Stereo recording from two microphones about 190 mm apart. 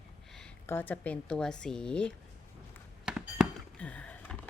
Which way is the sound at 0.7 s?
10° left (ahead or behind).